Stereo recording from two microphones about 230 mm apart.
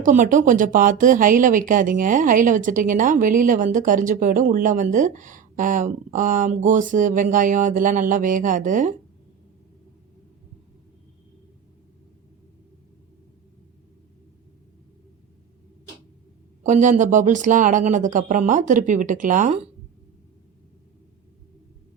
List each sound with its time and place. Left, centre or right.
0.0 s speech: right
16.6 s speech: right